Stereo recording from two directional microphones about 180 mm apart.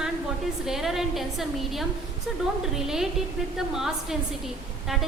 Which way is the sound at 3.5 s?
Centre (ahead or behind).